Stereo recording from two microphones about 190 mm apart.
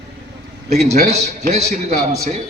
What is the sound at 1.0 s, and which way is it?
A man's voice, 35° right (ahead or behind).